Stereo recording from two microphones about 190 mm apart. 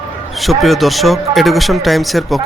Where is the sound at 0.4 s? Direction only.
Centre (ahead or behind).